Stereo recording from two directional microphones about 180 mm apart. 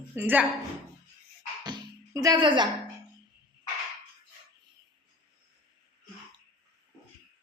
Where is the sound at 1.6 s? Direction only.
20° right (ahead or behind).